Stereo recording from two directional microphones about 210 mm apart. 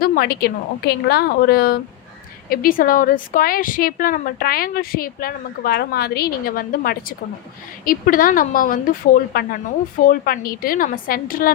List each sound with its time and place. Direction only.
0.0 s a woman's voice: 45° left (ahead or behind)